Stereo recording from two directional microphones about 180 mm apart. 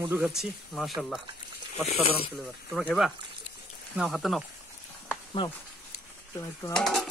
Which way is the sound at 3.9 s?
Centre (ahead or behind).